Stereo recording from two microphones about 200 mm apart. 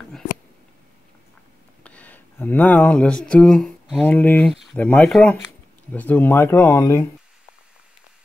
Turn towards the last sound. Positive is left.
turn(degrees=10)  # may be behind; listen again after turning